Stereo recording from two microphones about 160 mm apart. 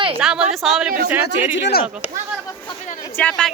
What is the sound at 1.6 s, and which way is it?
Speech, 90° left.